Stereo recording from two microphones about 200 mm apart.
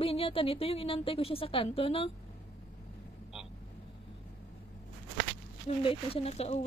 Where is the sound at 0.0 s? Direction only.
30° left (ahead or behind).